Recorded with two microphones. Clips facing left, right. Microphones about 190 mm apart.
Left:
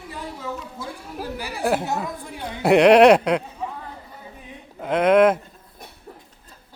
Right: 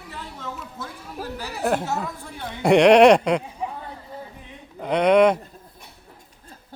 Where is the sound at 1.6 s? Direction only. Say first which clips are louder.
Left 1 dB; 5° left (ahead or behind).